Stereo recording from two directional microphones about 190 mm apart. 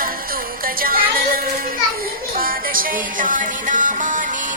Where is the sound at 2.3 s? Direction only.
50° right (ahead or behind).